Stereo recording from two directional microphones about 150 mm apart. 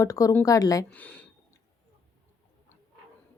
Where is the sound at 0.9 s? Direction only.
10° left (ahead or behind).